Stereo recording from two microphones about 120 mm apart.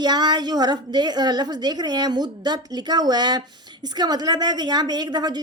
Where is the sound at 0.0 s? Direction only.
35° right (ahead or behind).